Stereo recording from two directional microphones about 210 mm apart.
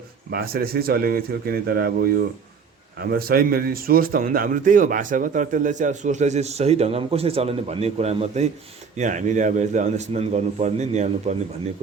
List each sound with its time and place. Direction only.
0.3 s speech: 45° right (ahead or behind)